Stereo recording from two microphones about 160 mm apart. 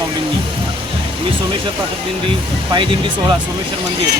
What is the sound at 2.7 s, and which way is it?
Speech, 30° right (ahead or behind).